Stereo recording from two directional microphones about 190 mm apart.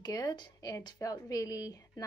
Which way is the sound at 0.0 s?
20° left (ahead or behind).